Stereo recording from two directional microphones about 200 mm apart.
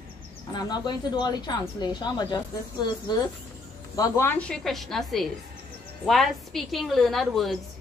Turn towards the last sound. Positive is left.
turn(degrees=0)  # may be behind; listen again after turning